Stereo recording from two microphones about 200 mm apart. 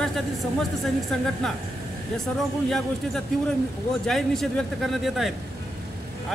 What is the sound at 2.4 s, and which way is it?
Speech, centre (ahead or behind).